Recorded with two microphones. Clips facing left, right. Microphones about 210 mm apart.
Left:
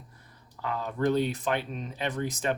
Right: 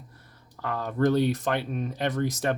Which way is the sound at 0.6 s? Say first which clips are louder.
Right 3 dB; 60° right (ahead or behind).